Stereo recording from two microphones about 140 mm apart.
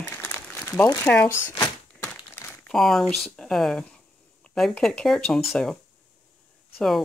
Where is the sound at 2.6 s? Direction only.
Centre (ahead or behind).